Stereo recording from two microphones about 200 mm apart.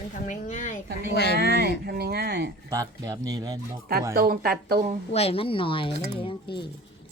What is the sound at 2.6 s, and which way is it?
Speech, 20° right (ahead or behind).